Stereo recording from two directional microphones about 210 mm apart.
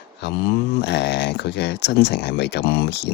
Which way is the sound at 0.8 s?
55° left (ahead or behind).